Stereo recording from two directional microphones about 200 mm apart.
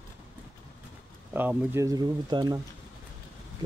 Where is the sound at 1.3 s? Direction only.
10° right (ahead or behind).